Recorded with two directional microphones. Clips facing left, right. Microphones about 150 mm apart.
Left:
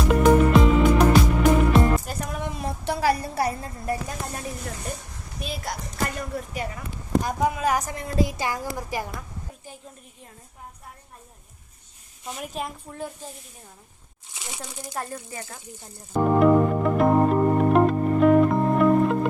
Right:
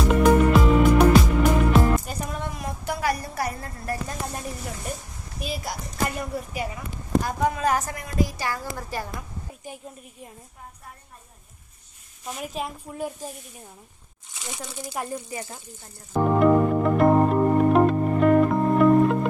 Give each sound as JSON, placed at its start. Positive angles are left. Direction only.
{"t": 0.1, "sound": "music", "side_deg": 0}
{"t": 2.4, "sound": "a sound", "side_deg": 25}
{"t": 4.0, "sound": "a woman's voice", "side_deg": 0}
{"t": 7.2, "sound": "a woman's voice", "side_deg": 20}
{"t": 7.9, "sound": "a woman's voice", "side_deg": 30}
{"t": 9.7, "sound": "a sound", "side_deg": -15}
{"t": 12.2, "sound": "a woman's voice", "side_deg": 0}
{"t": 14.9, "sound": "speech", "side_deg": -15}
{"t": 16.1, "sound": "music", "side_deg": 0}